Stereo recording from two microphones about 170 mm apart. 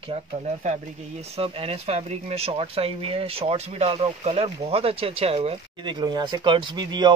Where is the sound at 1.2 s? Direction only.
35° right (ahead or behind).